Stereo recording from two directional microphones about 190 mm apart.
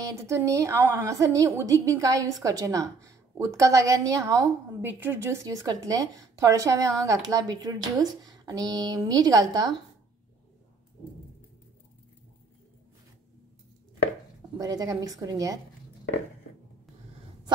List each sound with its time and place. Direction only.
0.0 s a woman's voice: 15° right (ahead or behind)
14.6 s a woman's voice: 20° right (ahead or behind)